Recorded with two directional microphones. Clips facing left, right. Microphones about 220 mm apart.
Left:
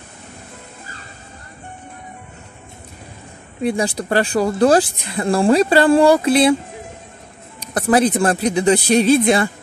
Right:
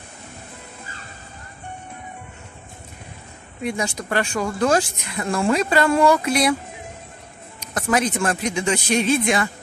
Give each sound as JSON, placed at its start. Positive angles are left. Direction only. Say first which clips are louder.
{"t": 3.6, "sound": "speech", "louder": "left 6 dB", "side_deg": 35}
{"t": 7.6, "sound": "speech", "louder": "left 6 dB", "side_deg": 35}